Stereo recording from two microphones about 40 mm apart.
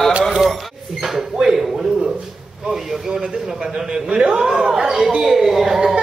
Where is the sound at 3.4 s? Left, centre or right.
Centre.